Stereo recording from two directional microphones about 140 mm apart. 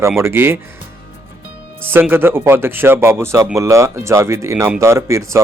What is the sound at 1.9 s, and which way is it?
Speech, 15° right (ahead or behind).